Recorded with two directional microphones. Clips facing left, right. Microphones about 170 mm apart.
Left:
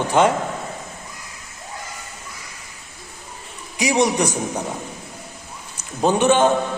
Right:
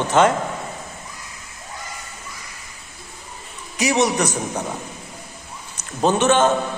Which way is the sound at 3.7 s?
15° left (ahead or behind).